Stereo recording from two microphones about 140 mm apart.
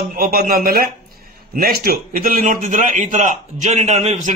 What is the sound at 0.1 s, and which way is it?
A man's voice, 90° right.